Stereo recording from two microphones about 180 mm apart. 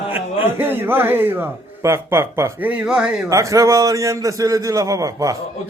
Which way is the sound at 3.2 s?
15° right (ahead or behind).